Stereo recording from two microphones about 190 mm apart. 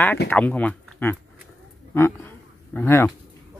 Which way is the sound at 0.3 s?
10° left (ahead or behind).